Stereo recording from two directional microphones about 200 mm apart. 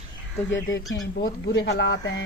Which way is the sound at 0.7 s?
15° left (ahead or behind).